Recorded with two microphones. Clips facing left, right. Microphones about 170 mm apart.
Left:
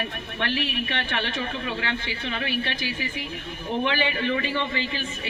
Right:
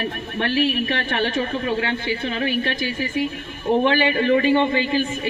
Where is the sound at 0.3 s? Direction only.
45° right (ahead or behind).